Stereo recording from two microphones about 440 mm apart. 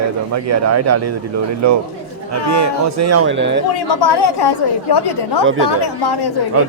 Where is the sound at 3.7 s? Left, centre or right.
Left.